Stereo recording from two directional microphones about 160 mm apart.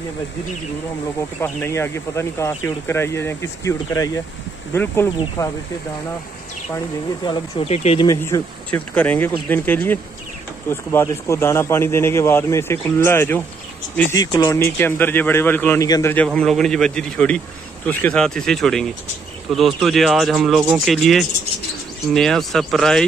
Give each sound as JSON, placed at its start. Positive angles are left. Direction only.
{"t": 1.4, "sound": "speech", "side_deg": 15}
{"t": 7.5, "sound": "speech", "side_deg": 40}
{"t": 8.2, "sound": "speech", "side_deg": 10}
{"t": 16.3, "sound": "speech", "side_deg": 5}